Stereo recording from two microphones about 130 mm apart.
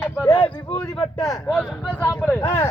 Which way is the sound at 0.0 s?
15° left (ahead or behind).